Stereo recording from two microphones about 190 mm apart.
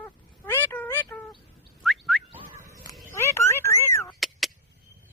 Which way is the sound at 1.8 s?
Centre (ahead or behind).